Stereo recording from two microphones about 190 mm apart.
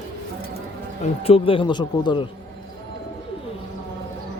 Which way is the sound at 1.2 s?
30° left (ahead or behind).